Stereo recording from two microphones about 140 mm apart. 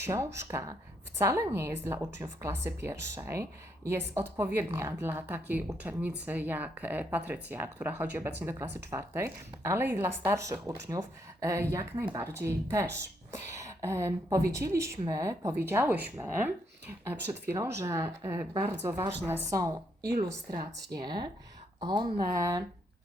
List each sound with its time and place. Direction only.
0.0 s a woman's voice: 20° right (ahead or behind)